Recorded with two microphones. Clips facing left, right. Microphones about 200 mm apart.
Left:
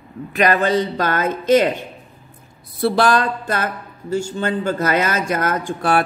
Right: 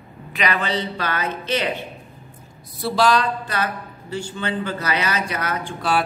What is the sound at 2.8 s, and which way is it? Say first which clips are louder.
Speech: left 3 dB; 55° left (ahead or behind).